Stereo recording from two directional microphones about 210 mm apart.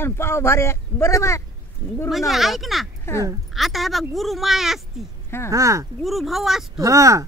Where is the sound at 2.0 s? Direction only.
Centre (ahead or behind).